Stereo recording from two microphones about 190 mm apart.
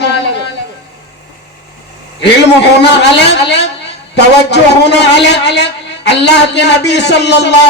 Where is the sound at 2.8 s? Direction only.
65° left (ahead or behind).